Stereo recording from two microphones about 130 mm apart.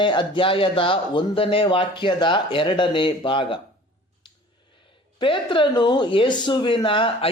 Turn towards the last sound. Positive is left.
turn(degrees=40)  # may be behind; listen again after turning